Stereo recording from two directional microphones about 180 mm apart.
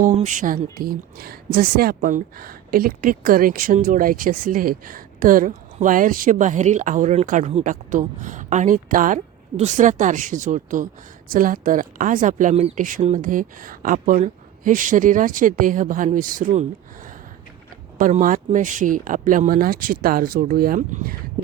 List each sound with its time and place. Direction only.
0.0 s speech: 45° right (ahead or behind)
17.9 s speech: 50° right (ahead or behind)